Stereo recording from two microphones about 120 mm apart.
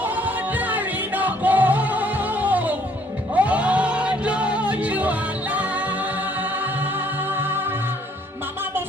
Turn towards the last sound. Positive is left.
turn(degrees=-20)  # may be behind; listen again after turning